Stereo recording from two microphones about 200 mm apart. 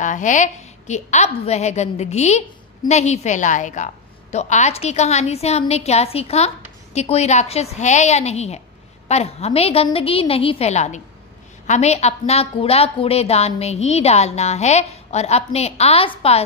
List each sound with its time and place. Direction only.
0.0 s a woman's voice: 40° left (ahead or behind)